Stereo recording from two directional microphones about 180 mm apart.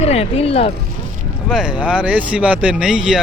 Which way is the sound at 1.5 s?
5° right (ahead or behind).